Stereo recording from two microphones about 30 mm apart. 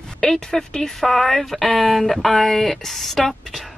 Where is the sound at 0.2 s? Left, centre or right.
Centre.